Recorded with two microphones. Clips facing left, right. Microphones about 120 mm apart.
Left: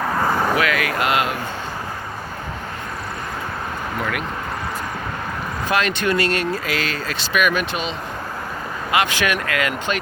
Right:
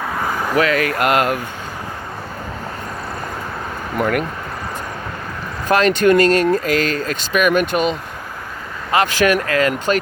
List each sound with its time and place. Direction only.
0.2 s vehicle: 5° left (ahead or behind)
0.5 s speech: 40° right (ahead or behind)
5.6 s speech: 40° right (ahead or behind)